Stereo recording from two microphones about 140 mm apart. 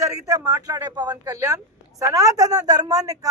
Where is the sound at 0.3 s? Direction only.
25° right (ahead or behind).